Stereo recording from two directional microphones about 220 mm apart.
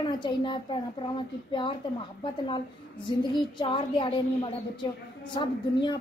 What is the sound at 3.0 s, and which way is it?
Speech, 20° left (ahead or behind).